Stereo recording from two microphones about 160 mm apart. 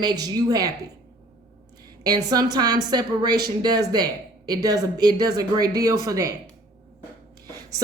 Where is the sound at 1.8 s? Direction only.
25° right (ahead or behind).